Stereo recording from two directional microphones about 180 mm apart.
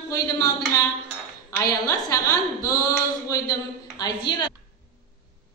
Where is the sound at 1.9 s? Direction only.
20° left (ahead or behind).